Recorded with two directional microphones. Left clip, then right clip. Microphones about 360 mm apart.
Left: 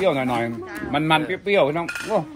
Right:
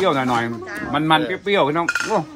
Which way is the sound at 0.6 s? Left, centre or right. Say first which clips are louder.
Right 3 dB; right.